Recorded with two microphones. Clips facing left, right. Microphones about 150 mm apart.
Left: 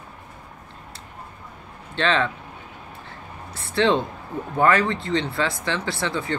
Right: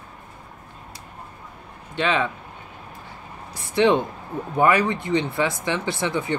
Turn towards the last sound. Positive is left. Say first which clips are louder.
# right 2 dB
turn(degrees=-15)  # may be behind; listen again after turning